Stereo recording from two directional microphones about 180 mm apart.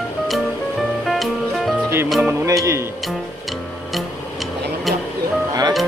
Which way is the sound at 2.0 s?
Centre (ahead or behind).